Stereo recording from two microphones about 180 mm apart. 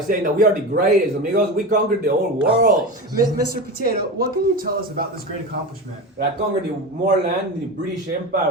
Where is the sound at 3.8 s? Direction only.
55° right (ahead or behind).